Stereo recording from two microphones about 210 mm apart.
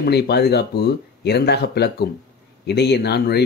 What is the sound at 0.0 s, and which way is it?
Speech, 50° left (ahead or behind).